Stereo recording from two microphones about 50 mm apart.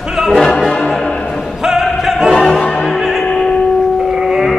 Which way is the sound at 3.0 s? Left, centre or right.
Centre.